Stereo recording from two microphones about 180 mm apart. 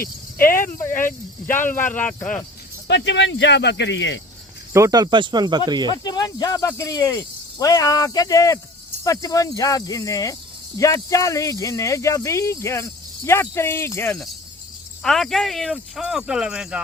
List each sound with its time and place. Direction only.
0.3 s speech: 15° left (ahead or behind)
2.8 s speech: 80° left
4.7 s speech: 20° right (ahead or behind)
5.9 s speech: 20° left (ahead or behind)
15.0 s speech: centre (ahead or behind)